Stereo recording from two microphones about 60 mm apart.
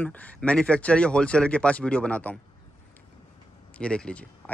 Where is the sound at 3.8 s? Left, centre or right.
Centre.